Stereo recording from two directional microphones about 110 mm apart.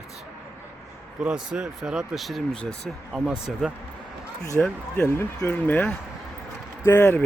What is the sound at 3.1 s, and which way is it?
Speech, 10° right (ahead or behind).